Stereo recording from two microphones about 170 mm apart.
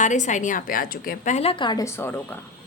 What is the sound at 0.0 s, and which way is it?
A woman's voice, 45° left (ahead or behind).